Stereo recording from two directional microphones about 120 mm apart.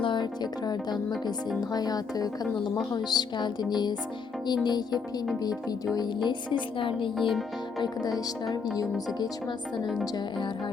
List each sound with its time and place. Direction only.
0.0 s music: 40° left (ahead or behind)
1.7 s speech: 35° left (ahead or behind)
6.2 s a woman's voice: 45° left (ahead or behind)
7.2 s speech: centre (ahead or behind)
8.4 s speech: 30° left (ahead or behind)
9.8 s speech: centre (ahead or behind)